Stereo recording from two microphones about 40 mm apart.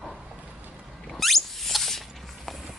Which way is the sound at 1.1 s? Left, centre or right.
Centre.